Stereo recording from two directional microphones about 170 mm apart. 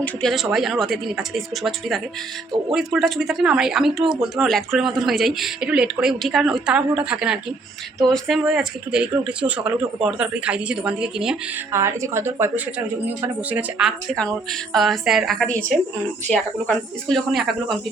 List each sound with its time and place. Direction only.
0.0 s speech: centre (ahead or behind)
11.7 s a woman's voice: 15° right (ahead or behind); by 17.7 s centre (ahead or behind)